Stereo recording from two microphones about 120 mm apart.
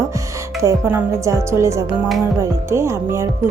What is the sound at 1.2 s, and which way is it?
Speech, 25° right (ahead or behind).